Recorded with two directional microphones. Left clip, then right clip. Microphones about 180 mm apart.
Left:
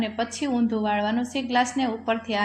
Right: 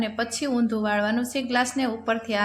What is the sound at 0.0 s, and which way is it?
A woman's voice, 15° right (ahead or behind).